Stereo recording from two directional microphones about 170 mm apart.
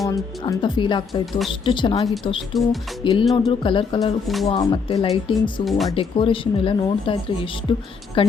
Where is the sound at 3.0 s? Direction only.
30° left (ahead or behind).